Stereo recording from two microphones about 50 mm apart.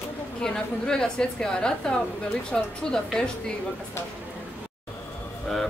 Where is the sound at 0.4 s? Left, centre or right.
Centre.